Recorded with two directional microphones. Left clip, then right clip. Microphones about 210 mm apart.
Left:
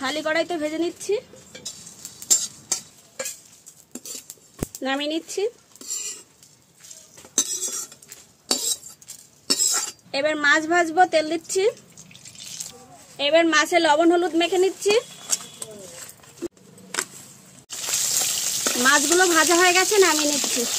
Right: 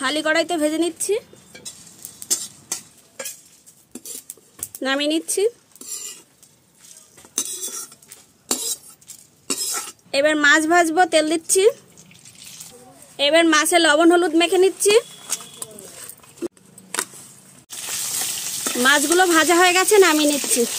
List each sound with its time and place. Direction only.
0.0 s a woman's voice: 55° right (ahead or behind)
2.3 s stir: centre (ahead or behind)
4.8 s a woman's voice: 55° right (ahead or behind)
7.3 s cutlery: 5° left (ahead or behind)
8.5 s a sound: 5° left (ahead or behind)
9.5 s cough: 5° left (ahead or behind)
10.1 s a woman's voice: 55° right (ahead or behind)
13.1 s a woman's voice: 55° right (ahead or behind)
16.4 s a sound: 5° right (ahead or behind)
17.6 s frying: centre (ahead or behind)
18.8 s speech: 40° right (ahead or behind)